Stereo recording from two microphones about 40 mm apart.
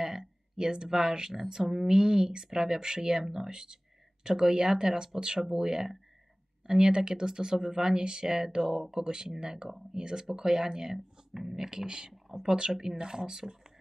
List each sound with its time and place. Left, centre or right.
0.0 s a sound: centre
1.5 s speech: centre
12.1 s speech: centre
12.7 s speech: centre